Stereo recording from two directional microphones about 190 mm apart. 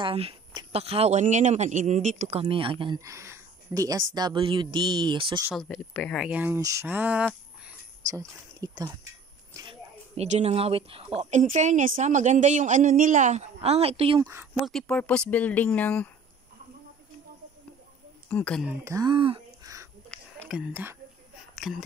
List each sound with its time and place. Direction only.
0.0 s speech: 30° right (ahead or behind)
2.4 s speech: 25° right (ahead or behind)
5.6 s speech: 5° left (ahead or behind)
8.1 s speech: 20° right (ahead or behind)
9.6 s a sound: 30° right (ahead or behind)
11.1 s speech: 35° right (ahead or behind)
14.3 s speech: 10° right (ahead or behind)
14.7 s speech: 5° left (ahead or behind)
18.3 s speech: 5° left (ahead or behind)
18.9 s speech: 20° right (ahead or behind)
20.1 s a sound: centre (ahead or behind)
21.5 s speech: centre (ahead or behind)